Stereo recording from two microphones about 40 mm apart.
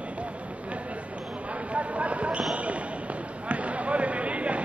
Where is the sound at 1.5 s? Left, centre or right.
Right.